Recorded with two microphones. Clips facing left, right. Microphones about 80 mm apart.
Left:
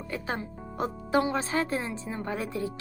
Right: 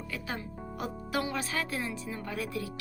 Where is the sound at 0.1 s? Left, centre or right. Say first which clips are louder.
Left 6 dB; left.